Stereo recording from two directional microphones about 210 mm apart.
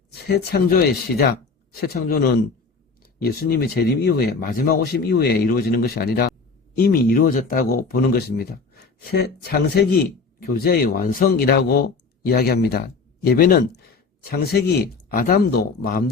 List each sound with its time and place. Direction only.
0.1 s speech: 50° left (ahead or behind)